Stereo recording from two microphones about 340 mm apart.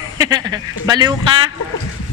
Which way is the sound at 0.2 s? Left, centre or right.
Centre.